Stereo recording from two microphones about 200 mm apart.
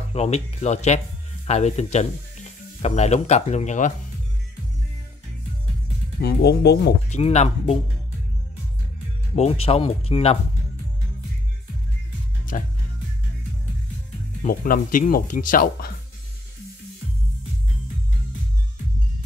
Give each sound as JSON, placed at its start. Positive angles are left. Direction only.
{"t": 0.1, "sound": "speech", "side_deg": 30}
{"t": 6.2, "sound": "speech", "side_deg": 55}
{"t": 7.1, "sound": "speech", "side_deg": 35}
{"t": 9.3, "sound": "speech", "side_deg": 30}
{"t": 12.5, "sound": "speech", "side_deg": 40}
{"t": 14.4, "sound": "speech", "side_deg": 45}